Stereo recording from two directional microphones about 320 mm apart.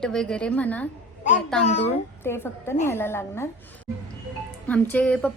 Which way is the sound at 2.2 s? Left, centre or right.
Centre.